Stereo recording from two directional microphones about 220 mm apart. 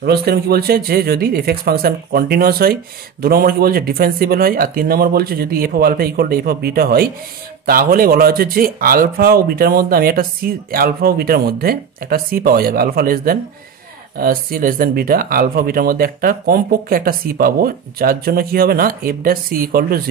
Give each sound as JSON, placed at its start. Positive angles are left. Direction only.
{"t": 0.0, "sound": "speech", "side_deg": -45}